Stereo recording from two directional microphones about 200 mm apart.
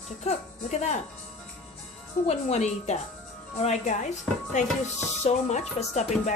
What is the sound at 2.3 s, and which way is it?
Speech, 35° left (ahead or behind).